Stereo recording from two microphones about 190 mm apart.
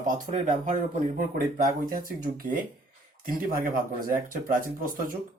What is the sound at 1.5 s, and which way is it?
Speech, 45° right (ahead or behind).